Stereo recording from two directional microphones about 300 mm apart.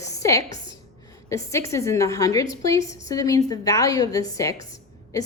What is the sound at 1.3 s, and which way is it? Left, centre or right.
A woman's voice, centre.